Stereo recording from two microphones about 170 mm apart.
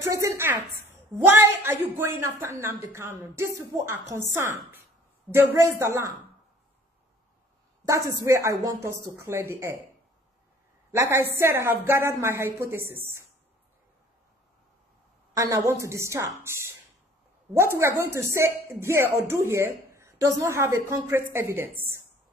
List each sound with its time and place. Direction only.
0.2 s a sound: 15° right (ahead or behind)
1.1 s speech: 15° right (ahead or behind)
7.8 s speech: 20° right (ahead or behind)
10.9 s speech: 15° right (ahead or behind)
15.3 s speech: 20° right (ahead or behind)
17.7 s speech: 15° right (ahead or behind)